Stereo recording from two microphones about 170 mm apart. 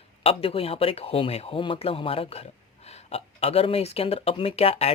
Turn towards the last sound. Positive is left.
turn(degrees=35)  # may be behind; listen again after turning